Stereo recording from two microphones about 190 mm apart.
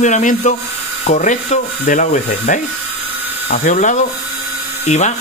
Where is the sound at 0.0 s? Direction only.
40° left (ahead or behind).